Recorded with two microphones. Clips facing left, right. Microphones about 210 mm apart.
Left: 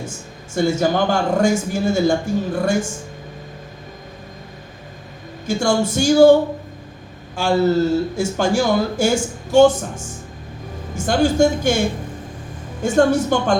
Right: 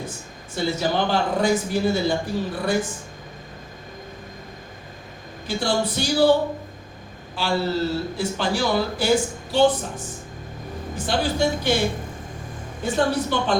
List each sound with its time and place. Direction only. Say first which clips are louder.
0.5 s speech: left 5 dB; 45° left (ahead or behind)
5.5 s speech: left 5 dB; 45° left (ahead or behind)
7.3 s speech: left 7 dB; 45° left (ahead or behind)
12.8 s speech: left 7 dB; 45° left (ahead or behind)